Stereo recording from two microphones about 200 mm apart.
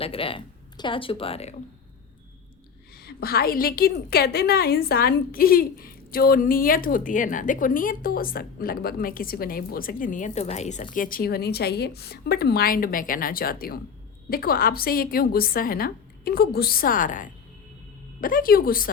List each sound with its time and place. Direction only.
0.0 s speech: 25° left (ahead or behind)
2.9 s a woman's voice: 50° left (ahead or behind)